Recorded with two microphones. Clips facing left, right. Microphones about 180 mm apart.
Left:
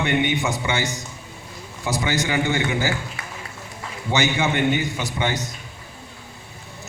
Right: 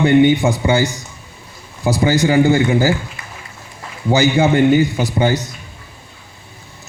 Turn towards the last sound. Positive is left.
turn(degrees=-35)  # may be behind; listen again after turning